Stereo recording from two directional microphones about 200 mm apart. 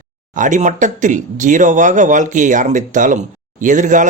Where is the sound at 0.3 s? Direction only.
40° right (ahead or behind).